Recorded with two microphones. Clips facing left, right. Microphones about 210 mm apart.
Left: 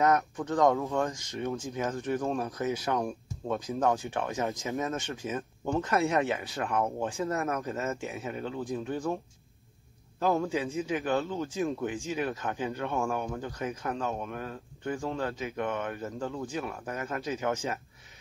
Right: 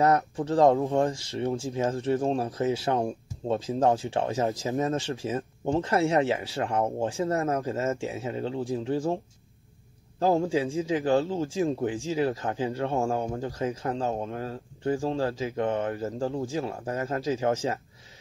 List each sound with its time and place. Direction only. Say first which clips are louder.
0.0 s speech: right 3 dB; 30° right (ahead or behind)